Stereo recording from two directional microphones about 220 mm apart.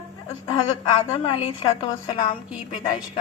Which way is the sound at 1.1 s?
25° left (ahead or behind).